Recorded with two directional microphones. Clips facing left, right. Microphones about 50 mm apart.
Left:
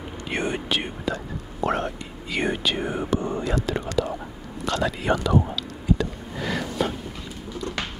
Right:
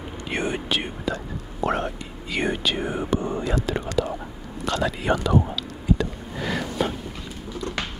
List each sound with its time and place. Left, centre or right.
0.3 s whispering: centre
3.1 s whispering: centre